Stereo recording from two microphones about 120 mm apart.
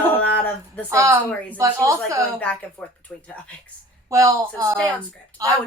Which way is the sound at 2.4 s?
10° left (ahead or behind).